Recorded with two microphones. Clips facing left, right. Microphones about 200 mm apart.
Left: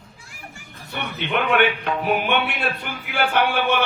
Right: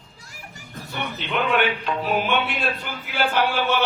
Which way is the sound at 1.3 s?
60° left (ahead or behind).